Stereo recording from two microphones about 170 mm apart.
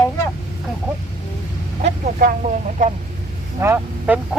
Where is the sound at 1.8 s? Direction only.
55° right (ahead or behind).